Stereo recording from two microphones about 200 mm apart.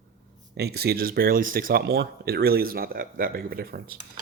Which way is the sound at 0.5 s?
55° right (ahead or behind).